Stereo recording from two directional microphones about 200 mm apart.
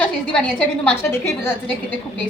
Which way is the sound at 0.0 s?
5° left (ahead or behind).